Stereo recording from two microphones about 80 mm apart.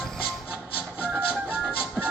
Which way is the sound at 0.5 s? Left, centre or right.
Centre.